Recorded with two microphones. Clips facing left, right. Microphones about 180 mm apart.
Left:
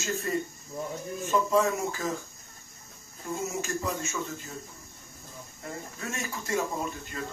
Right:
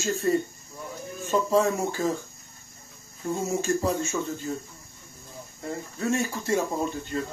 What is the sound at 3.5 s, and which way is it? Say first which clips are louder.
Speech: right 7 dB; 30° right (ahead or behind).